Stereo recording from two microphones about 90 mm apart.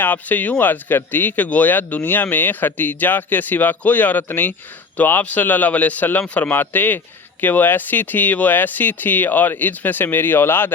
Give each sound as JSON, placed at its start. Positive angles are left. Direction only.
{"t": 0.0, "sound": "speech", "side_deg": 20}